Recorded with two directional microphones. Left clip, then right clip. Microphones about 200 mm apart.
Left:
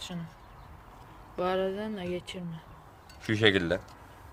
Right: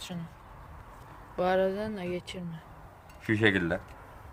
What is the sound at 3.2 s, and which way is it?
Speech, 20° left (ahead or behind).